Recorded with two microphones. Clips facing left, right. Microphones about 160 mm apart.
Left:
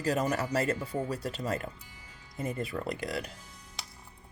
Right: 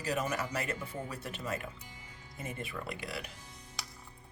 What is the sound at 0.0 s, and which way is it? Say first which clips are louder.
Speech: left 5 dB; 40° left (ahead or behind).